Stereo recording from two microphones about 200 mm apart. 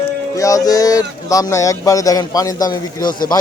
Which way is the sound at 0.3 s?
15° left (ahead or behind).